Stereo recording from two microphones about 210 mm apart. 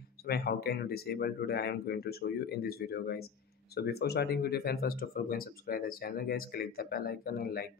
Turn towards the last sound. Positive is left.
turn(degrees=45)  # may be behind; listen again after turning